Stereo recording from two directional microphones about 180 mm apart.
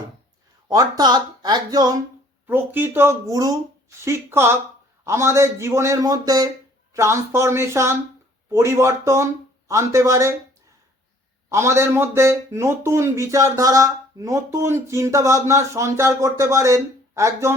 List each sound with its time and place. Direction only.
0.7 s speech: 20° right (ahead or behind)
2.5 s speech: 10° right (ahead or behind)
11.4 s speech: 15° right (ahead or behind)